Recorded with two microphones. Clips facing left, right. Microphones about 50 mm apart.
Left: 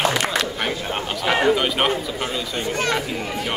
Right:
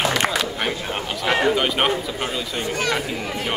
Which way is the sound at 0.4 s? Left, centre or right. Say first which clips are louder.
Even; centre.